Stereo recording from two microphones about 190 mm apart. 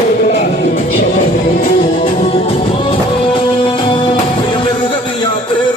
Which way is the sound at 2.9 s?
25° left (ahead or behind).